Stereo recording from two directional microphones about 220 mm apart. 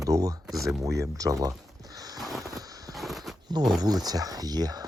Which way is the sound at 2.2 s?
Centre (ahead or behind).